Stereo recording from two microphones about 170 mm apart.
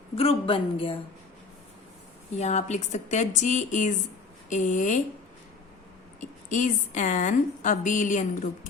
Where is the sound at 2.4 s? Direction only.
40° left (ahead or behind).